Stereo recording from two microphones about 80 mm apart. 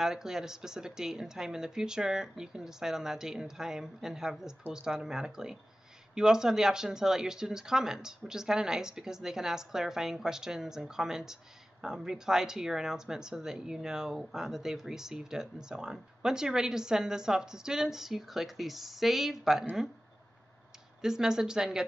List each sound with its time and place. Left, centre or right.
0.0 s a woman's voice: centre
21.0 s a woman's voice: centre